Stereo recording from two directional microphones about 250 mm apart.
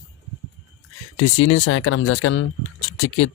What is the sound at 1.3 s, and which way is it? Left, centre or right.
Speech, left.